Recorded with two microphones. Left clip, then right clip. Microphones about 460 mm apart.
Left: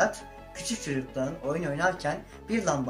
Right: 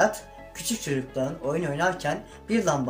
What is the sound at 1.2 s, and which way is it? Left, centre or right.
Speech, left.